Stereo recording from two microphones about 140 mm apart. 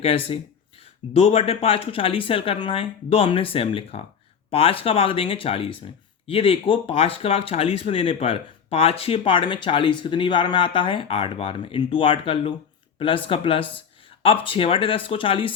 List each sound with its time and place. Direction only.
0.0 s speech: 45° left (ahead or behind)